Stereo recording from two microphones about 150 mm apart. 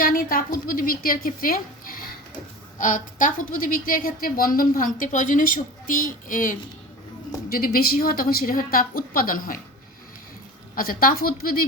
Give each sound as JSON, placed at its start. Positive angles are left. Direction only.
{"t": 0.0, "sound": "a woman's voice", "side_deg": 70}
{"t": 2.7, "sound": "a woman's voice", "side_deg": 60}
{"t": 7.5, "sound": "a woman's voice", "side_deg": 80}
{"t": 10.8, "sound": "a woman's voice", "side_deg": 75}